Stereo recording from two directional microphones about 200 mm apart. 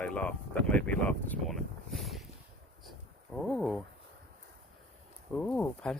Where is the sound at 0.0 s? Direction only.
5° left (ahead or behind).